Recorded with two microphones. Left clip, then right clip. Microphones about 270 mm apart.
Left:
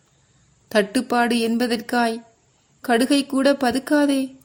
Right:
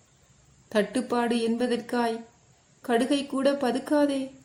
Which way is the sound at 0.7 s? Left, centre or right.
Left.